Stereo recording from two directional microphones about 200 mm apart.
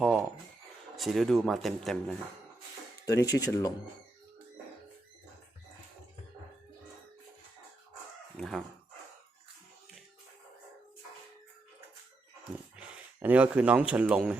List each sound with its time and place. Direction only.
0.9 s speech: centre (ahead or behind)
3.1 s speech: 20° left (ahead or behind)
8.4 s dog: centre (ahead or behind)
12.7 s speech: 5° right (ahead or behind)